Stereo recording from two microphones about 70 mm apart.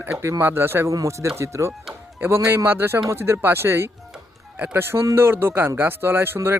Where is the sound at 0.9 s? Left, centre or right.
Right.